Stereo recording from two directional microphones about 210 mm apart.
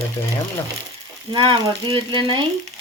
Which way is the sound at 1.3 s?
25° right (ahead or behind).